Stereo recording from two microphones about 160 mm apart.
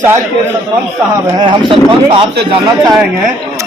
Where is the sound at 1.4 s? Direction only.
30° right (ahead or behind).